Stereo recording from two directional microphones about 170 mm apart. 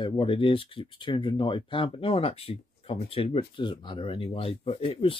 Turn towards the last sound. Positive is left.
turn(degrees=35)  # may be behind; listen again after turning